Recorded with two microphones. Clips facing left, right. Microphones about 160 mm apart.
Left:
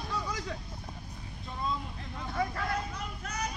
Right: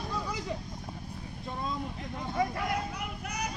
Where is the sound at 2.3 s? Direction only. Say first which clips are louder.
Right 2 dB; 15° right (ahead or behind).